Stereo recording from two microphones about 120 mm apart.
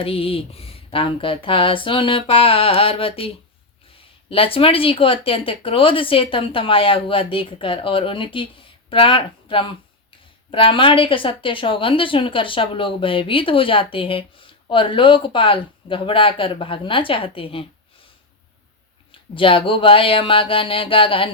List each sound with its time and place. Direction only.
0.0 s speech: 55° left (ahead or behind)
19.1 s speech: 45° left (ahead or behind)